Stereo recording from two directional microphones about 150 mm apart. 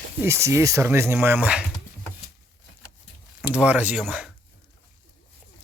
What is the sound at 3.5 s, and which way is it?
Speech, 10° right (ahead or behind).